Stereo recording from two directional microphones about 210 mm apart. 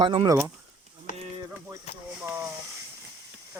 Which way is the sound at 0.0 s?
20° right (ahead or behind).